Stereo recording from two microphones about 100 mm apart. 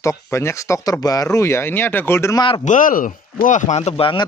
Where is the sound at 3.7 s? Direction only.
85° left.